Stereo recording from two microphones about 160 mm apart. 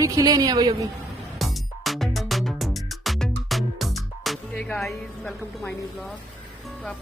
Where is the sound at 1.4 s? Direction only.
Centre (ahead or behind).